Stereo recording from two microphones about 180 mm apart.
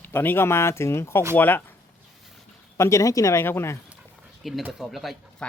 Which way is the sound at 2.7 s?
15° left (ahead or behind).